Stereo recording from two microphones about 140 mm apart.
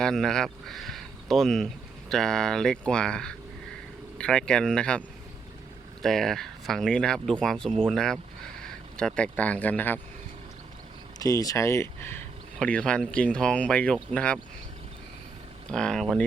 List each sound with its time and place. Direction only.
0.0 s speech: 5° left (ahead or behind)
11.2 s speech: 25° left (ahead or behind); by 14.3 s 10° left (ahead or behind)
15.7 s speech: 5° left (ahead or behind)